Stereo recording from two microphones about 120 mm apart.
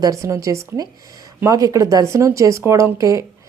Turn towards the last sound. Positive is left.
turn(degrees=-25)  # may be behind; listen again after turning